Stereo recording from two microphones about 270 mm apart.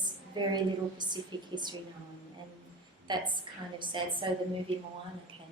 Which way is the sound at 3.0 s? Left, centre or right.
Centre.